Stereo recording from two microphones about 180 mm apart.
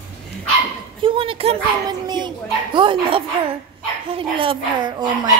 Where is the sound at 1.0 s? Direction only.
30° right (ahead or behind).